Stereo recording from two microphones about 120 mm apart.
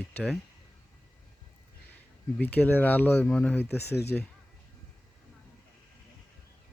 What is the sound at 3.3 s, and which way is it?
Speech, 5° left (ahead or behind).